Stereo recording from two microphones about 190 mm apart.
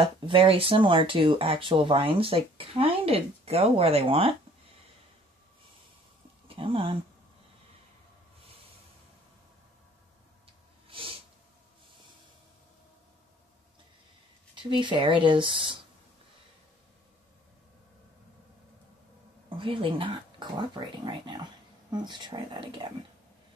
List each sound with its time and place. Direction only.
0.0 s speech: 25° right (ahead or behind)
6.4 s speech: 30° right (ahead or behind)
10.9 s snort: 25° right (ahead or behind)
14.5 s speech: 25° right (ahead or behind)
19.5 s speech: 25° right (ahead or behind)